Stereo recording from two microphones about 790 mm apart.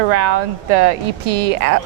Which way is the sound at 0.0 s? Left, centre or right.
Right.